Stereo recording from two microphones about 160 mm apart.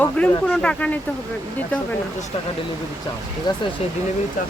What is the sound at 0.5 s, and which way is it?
Speech, 5° left (ahead or behind).